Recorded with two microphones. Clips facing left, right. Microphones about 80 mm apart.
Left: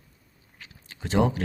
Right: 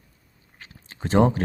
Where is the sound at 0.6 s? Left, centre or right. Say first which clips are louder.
Right 5 dB; right.